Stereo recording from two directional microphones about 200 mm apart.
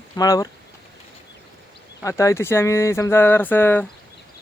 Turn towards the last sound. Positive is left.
turn(degrees=10)  # may be behind; listen again after turning